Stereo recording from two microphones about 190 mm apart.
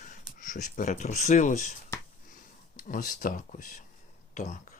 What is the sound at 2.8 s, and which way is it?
Speech, 45° left (ahead or behind).